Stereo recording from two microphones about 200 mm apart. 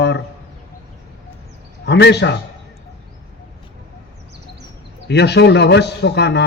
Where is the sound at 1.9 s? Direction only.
55° left (ahead or behind).